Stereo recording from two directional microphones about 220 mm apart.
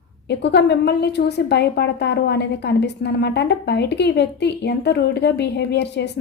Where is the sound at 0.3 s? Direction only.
50° left (ahead or behind).